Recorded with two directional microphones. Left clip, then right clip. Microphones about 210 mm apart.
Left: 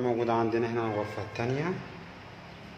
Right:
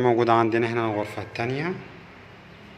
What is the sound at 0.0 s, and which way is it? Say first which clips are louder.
A man's voice: right 8 dB; 20° right (ahead or behind).